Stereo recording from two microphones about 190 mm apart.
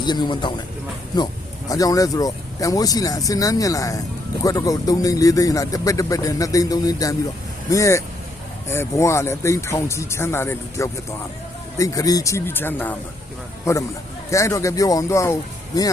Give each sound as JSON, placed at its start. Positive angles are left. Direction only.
{"t": 0.0, "sound": "speech", "side_deg": 25}
{"t": 1.7, "sound": "speech", "side_deg": 20}